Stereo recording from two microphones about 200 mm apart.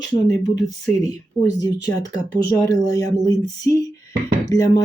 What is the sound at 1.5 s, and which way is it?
Speech, 15° left (ahead or behind).